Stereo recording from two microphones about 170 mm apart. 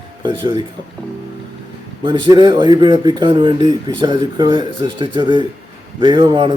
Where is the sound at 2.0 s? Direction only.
25° right (ahead or behind).